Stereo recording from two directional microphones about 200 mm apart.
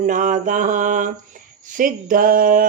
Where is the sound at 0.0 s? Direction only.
40° right (ahead or behind).